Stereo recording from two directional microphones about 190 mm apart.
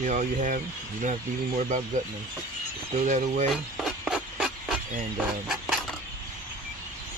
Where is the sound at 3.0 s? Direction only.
40° right (ahead or behind).